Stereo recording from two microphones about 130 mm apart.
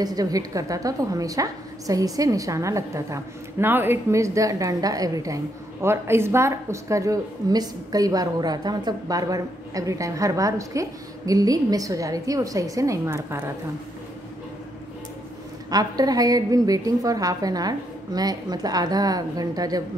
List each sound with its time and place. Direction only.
0.0 s a woman's voice: 30° right (ahead or behind)
15.7 s a woman's voice: 30° right (ahead or behind)